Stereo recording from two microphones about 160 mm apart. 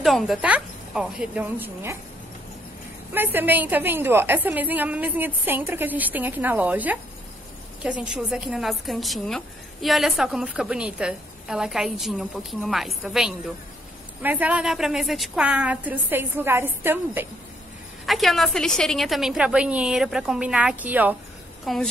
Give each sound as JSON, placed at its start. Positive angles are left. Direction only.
{"t": 0.0, "sound": "a woman's voice", "side_deg": 0}
{"t": 3.1, "sound": "a woman's voice", "side_deg": -15}
{"t": 18.0, "sound": "a woman's voice", "side_deg": 0}
{"t": 21.7, "sound": "a woman's voice", "side_deg": 0}